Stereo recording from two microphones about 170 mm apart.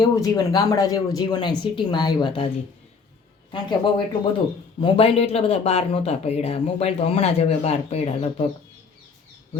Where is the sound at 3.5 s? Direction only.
30° left (ahead or behind).